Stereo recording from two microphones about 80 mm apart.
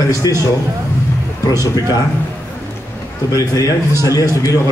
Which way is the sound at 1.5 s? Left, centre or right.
Left.